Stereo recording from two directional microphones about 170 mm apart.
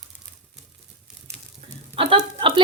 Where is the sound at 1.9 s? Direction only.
30° right (ahead or behind).